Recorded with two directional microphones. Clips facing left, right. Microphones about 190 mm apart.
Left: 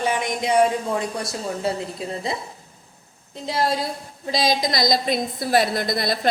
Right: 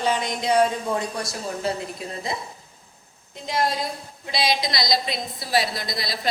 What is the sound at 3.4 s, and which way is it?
A woman's voice, 30° left (ahead or behind).